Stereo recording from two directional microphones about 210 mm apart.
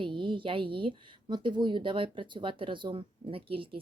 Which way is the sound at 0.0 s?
25° right (ahead or behind).